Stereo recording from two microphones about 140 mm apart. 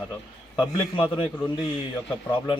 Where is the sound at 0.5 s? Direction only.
35° left (ahead or behind).